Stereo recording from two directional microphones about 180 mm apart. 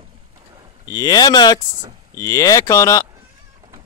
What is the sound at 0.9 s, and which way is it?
Speech, 20° left (ahead or behind).